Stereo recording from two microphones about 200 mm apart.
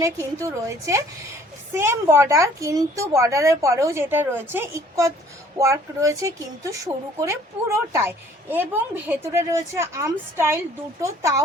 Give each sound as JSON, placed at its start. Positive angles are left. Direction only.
{"t": 0.0, "sound": "a woman's voice", "side_deg": -15}